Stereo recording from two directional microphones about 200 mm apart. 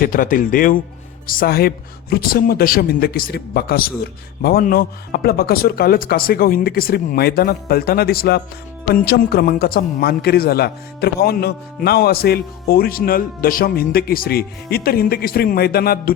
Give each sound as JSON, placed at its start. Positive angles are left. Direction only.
{"t": 0.0, "sound": "a man's voice", "side_deg": 45}